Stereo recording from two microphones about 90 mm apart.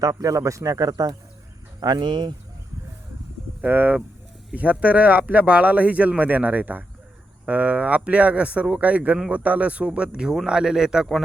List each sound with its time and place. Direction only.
0.0 s speech: 35° right (ahead or behind)
1.8 s speech: 55° right (ahead or behind)
3.6 s speech: 20° right (ahead or behind); by 11.2 s 5° right (ahead or behind)